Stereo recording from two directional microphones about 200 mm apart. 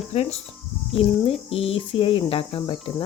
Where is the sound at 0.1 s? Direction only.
30° left (ahead or behind).